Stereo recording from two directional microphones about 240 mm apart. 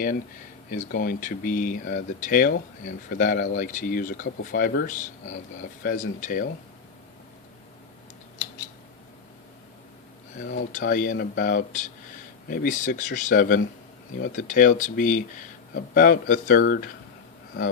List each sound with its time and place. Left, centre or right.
0.9 s speech: left
10.3 s speech: left